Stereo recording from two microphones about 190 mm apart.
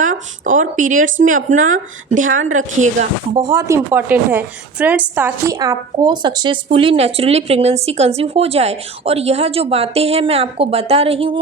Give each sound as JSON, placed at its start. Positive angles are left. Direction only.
{"t": 0.0, "sound": "speech", "side_deg": -45}
{"t": 3.3, "sound": "a woman's voice", "side_deg": -15}
{"t": 5.5, "sound": "speech", "side_deg": -20}